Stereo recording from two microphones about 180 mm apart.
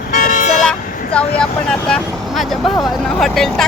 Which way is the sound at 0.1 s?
50° left (ahead or behind).